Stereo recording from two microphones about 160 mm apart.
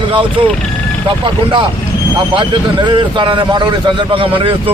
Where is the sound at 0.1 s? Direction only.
30° right (ahead or behind).